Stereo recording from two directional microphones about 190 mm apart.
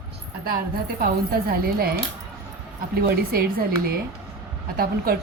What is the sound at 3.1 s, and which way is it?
Speech, 55° right (ahead or behind).